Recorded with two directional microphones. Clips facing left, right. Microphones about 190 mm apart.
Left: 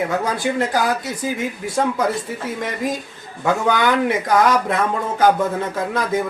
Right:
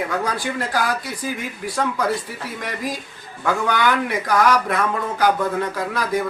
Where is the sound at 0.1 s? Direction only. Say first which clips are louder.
Left 3 dB; 20° left (ahead or behind).